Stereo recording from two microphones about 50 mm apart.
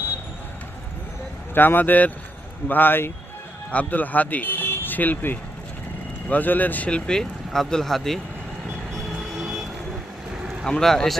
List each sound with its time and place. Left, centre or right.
1.5 s speech: left
3.7 s speech: left
7.1 s speech: centre
9.4 s vehicle: centre
10.7 s speech: centre